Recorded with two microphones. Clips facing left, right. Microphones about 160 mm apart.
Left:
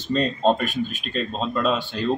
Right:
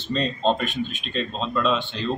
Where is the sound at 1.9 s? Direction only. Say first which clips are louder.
Left 3 dB; 55° left (ahead or behind).